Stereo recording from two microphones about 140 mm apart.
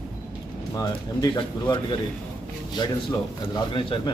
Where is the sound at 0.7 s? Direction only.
25° left (ahead or behind).